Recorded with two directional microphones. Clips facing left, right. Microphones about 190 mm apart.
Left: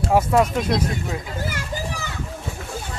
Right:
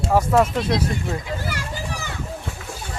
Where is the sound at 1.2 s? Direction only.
45° left (ahead or behind).